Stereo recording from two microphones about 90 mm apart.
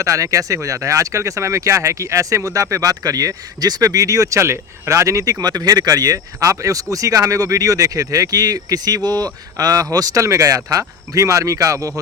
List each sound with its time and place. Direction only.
0.0 s speech: 35° right (ahead or behind)